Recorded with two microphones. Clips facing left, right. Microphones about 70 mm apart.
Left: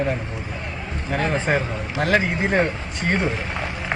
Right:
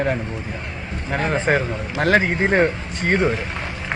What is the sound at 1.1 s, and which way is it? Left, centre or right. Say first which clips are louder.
Speech: right 2 dB; right.